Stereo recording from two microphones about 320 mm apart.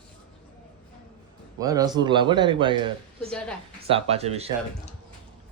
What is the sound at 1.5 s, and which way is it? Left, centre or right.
A man's voice, centre.